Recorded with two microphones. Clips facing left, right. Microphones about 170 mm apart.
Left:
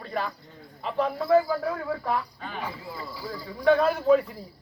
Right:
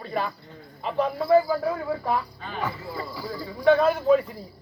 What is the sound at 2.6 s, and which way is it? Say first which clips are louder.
Speech: right 6 dB; 70° right (ahead or behind).